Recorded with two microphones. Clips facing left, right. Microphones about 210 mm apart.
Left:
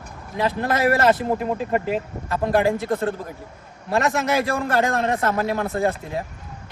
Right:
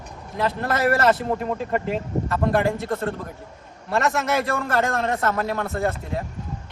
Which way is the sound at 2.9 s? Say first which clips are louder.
Left 3 dB; 30° left (ahead or behind).